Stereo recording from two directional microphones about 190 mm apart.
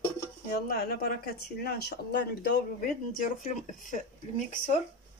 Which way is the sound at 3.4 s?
45° left (ahead or behind).